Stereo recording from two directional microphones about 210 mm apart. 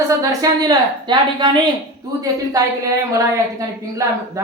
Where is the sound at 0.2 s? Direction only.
15° right (ahead or behind).